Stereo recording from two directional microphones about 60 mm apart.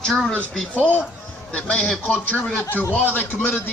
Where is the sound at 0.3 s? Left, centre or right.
Left.